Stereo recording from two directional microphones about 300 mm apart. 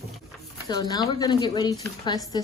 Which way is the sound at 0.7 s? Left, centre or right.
Centre.